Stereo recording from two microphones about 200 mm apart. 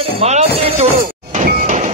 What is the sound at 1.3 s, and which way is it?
Music, 40° right (ahead or behind).